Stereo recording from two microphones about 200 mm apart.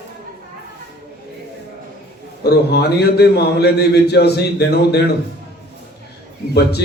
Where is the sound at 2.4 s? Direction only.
55° left (ahead or behind).